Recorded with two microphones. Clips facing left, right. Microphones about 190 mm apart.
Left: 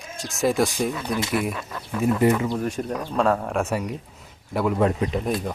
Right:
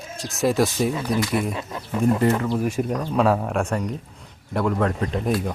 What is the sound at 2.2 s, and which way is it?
Speech, 10° left (ahead or behind).